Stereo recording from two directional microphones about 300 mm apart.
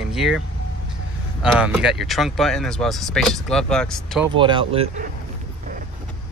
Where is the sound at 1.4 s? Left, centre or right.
Centre.